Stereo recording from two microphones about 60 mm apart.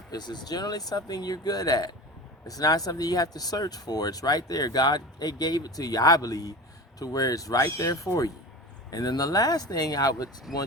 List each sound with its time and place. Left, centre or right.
0.1 s speech: left
8.9 s speech: left
10.5 s speech: centre